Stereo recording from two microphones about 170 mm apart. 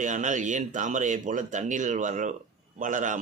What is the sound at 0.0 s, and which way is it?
A man's voice, 50° right (ahead or behind).